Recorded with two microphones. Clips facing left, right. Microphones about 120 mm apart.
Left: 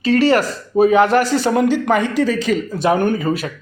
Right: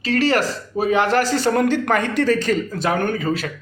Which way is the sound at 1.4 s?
10° left (ahead or behind).